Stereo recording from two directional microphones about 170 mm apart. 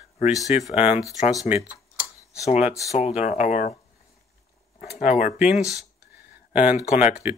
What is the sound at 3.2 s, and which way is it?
Speech, 45° left (ahead or behind).